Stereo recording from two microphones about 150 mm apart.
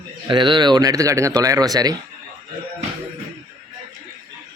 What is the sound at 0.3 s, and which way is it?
A man's voice, 30° right (ahead or behind).